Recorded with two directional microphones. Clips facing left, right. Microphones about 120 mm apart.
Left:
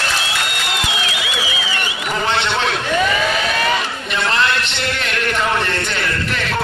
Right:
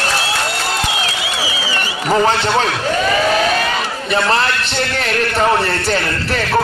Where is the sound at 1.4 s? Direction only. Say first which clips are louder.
Right 2 dB; 35° right (ahead or behind).